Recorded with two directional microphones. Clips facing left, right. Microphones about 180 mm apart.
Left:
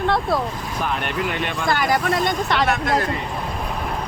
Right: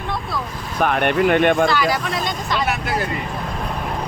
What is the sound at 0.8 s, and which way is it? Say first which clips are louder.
Speech: right 8 dB; 60° right (ahead or behind).